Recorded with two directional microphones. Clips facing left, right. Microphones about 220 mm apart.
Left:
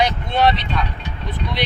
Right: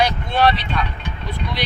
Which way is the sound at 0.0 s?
20° left (ahead or behind).